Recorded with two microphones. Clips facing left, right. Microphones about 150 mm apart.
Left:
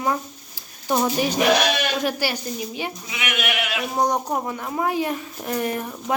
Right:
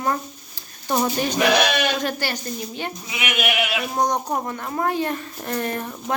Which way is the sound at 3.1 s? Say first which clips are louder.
Right 3 dB; 10° right (ahead or behind).